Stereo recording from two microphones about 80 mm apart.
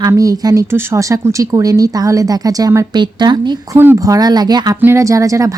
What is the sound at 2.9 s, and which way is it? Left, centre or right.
Speech, right.